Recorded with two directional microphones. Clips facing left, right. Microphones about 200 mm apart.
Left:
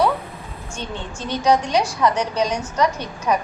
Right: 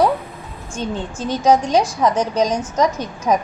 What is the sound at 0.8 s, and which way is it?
A woman's voice, 45° right (ahead or behind).